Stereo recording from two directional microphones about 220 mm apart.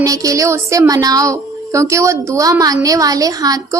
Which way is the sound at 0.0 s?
15° right (ahead or behind).